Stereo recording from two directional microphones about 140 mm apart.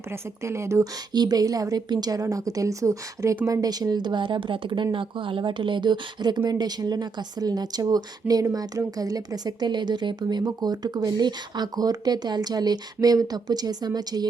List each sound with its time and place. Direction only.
0.1 s speech: 20° right (ahead or behind)